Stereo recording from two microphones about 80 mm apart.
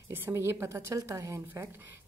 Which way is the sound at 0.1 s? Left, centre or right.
Right.